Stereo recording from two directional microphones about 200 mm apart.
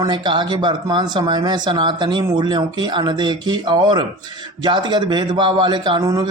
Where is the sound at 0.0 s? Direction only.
20° right (ahead or behind).